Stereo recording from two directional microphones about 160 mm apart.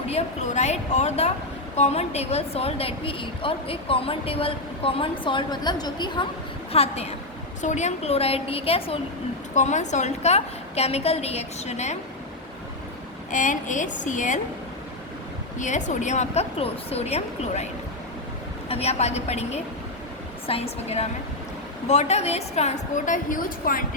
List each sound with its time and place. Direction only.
0.1 s a woman's voice: 40° left (ahead or behind); by 6.2 s 25° left (ahead or behind)
6.7 s a woman's voice: 40° left (ahead or behind)
9.6 s a woman's voice: 45° left (ahead or behind)
13.3 s a woman's voice: 50° left (ahead or behind)
15.5 s a woman's voice: 50° left (ahead or behind)
18.7 s a woman's voice: 40° left (ahead or behind); by 23.8 s 60° left (ahead or behind)